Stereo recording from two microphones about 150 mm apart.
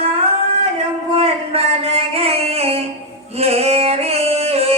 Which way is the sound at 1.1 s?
40° right (ahead or behind).